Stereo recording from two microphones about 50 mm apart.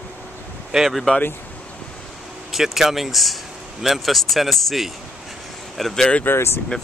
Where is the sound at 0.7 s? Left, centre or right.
Centre.